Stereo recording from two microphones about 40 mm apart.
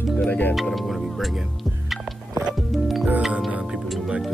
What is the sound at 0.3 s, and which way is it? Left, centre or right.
Speech, left.